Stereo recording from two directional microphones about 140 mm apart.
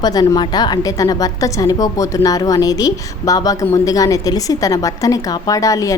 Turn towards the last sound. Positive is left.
turn(degrees=25)  # may be behind; listen again after turning